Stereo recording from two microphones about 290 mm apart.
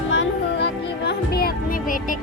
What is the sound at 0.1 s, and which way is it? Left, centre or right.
Music, left.